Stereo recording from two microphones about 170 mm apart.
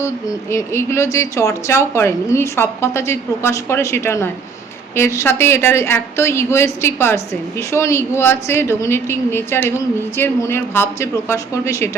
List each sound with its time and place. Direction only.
0.5 s a woman's voice: 15° left (ahead or behind)